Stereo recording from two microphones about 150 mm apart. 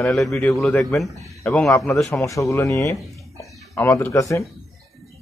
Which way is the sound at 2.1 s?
20° left (ahead or behind).